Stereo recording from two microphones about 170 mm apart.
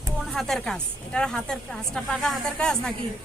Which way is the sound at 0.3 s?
Centre (ahead or behind).